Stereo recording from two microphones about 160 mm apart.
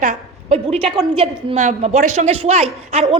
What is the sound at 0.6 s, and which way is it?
A woman's voice, 35° right (ahead or behind).